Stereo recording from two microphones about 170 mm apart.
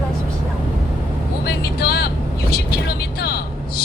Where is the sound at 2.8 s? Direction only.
70° left (ahead or behind).